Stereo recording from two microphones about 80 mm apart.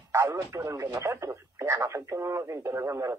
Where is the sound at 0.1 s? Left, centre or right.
Right.